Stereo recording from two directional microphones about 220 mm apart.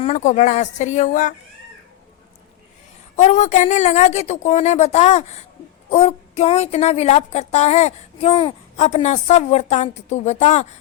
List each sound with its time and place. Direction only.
0.0 s speech: 35° left (ahead or behind)
3.2 s a woman's voice: 35° left (ahead or behind)